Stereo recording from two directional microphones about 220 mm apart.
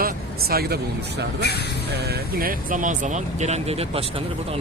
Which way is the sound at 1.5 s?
45° left (ahead or behind).